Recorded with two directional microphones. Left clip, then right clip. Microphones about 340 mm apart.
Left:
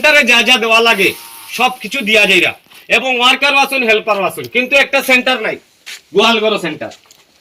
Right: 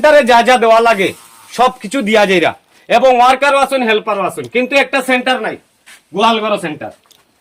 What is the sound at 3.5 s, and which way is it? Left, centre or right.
A man's voice, centre.